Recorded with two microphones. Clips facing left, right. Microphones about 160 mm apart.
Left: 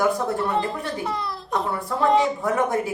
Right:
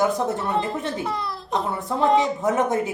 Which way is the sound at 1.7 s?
20° right (ahead or behind).